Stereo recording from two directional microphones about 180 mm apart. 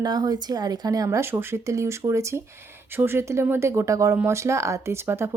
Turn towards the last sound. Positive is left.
turn(degrees=-15)  # may be behind; listen again after turning